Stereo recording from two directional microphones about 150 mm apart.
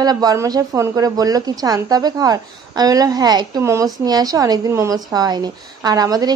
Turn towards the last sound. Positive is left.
turn(degrees=-25)  # may be behind; listen again after turning